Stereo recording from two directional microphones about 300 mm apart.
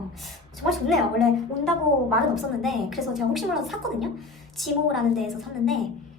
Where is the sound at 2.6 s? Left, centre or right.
Centre.